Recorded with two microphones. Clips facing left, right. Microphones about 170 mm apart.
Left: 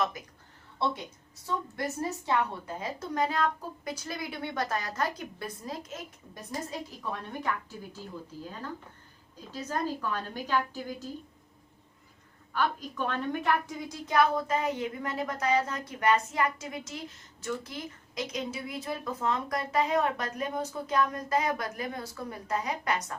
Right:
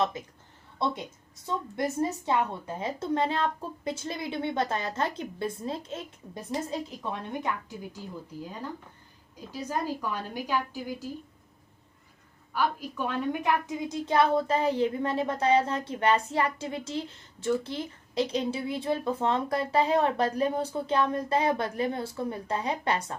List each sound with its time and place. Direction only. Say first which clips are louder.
0.0 s a woman's voice: right 3 dB; 25° right (ahead or behind)
1.5 s a woman's voice: right 3 dB; 20° right (ahead or behind)
12.5 s a woman's voice: right 1 dB; 10° right (ahead or behind); by 23.1 s 30° right (ahead or behind)